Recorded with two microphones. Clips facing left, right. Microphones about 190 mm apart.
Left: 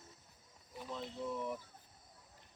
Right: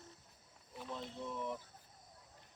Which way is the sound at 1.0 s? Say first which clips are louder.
Left 4 dB; 10° left (ahead or behind).